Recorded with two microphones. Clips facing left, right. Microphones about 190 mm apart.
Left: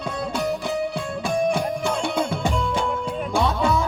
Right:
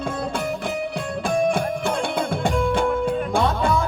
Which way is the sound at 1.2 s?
55° right (ahead or behind).